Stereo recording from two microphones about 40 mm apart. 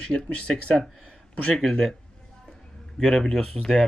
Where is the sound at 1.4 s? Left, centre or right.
Centre.